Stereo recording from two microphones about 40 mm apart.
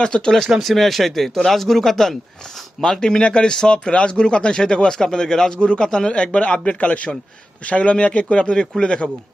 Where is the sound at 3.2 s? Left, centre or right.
Left.